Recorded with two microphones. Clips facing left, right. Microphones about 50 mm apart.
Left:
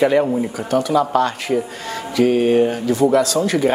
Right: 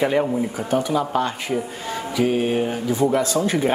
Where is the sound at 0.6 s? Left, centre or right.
Centre.